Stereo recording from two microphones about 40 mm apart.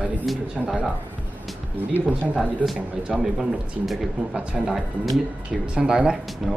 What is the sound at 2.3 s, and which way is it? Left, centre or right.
Speech, centre.